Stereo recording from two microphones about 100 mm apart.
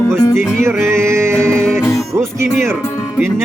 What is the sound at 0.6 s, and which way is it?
Music, 25° right (ahead or behind).